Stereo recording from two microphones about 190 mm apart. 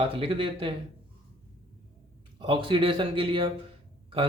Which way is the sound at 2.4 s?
25° right (ahead or behind).